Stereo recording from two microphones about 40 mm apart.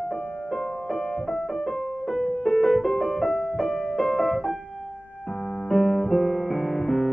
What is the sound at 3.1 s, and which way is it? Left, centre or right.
Music, centre.